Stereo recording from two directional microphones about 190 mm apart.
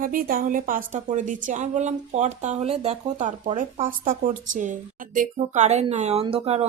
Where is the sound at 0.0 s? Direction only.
50° right (ahead or behind); by 3.5 s 30° right (ahead or behind).